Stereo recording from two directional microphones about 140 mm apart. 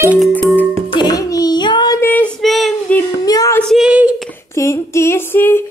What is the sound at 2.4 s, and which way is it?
Child singing, centre (ahead or behind).